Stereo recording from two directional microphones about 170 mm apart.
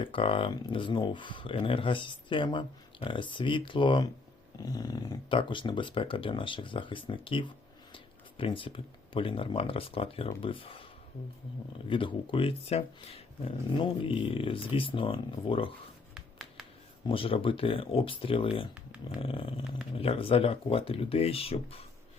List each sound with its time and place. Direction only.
0.0 s speech: 30° left (ahead or behind)
11.9 s speech: 30° left (ahead or behind)
17.1 s speech: 35° left (ahead or behind)